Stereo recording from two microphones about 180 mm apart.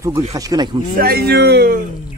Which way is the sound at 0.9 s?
60° right (ahead or behind).